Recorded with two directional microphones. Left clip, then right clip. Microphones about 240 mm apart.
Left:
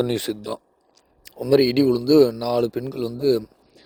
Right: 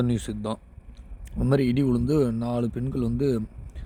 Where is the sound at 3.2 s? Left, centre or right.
Left.